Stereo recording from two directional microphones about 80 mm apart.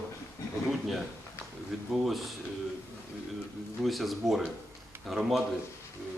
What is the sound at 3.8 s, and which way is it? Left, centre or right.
A man's voice, centre.